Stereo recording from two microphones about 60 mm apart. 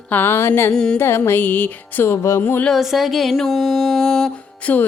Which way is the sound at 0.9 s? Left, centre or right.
Left.